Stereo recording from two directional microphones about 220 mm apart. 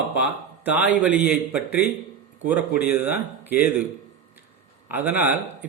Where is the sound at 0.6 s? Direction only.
5° right (ahead or behind).